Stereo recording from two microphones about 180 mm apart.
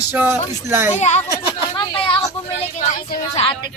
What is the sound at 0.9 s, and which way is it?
Speech, 40° left (ahead or behind).